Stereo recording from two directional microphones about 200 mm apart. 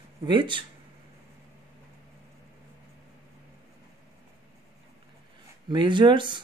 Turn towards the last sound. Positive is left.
turn(degrees=-25)  # may be behind; listen again after turning